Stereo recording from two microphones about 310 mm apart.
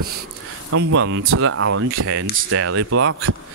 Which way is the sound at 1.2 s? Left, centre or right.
Right.